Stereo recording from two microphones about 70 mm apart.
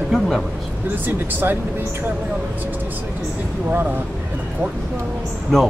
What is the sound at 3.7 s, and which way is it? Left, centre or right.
Speech, right.